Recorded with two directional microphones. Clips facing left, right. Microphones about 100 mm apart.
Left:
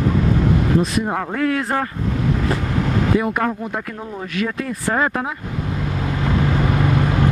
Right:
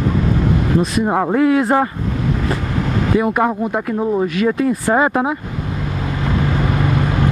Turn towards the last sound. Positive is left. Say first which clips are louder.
# even
turn(degrees=-25)  # may be behind; listen again after turning